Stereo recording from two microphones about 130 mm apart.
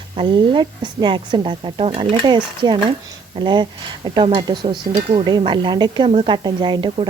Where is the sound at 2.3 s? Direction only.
35° right (ahead or behind).